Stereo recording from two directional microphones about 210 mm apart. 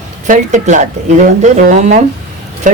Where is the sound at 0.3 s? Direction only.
35° right (ahead or behind).